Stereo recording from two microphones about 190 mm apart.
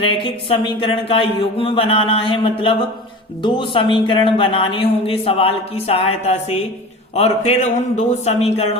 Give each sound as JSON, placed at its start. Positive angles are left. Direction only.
{"t": 0.0, "sound": "a man's voice", "side_deg": 25}